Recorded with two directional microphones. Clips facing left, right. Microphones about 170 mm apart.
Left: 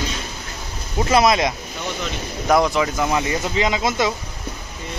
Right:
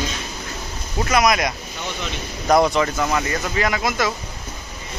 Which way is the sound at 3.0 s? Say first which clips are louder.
Left 1 dB; 15° left (ahead or behind).